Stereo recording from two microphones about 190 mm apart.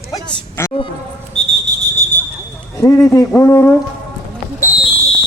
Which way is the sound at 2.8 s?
15° left (ahead or behind).